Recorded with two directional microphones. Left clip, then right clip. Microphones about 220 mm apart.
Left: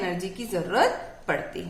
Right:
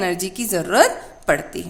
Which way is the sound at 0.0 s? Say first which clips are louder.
Right 7 dB; 50° right (ahead or behind).